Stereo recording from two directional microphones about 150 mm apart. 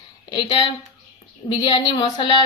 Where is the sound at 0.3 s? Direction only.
35° left (ahead or behind).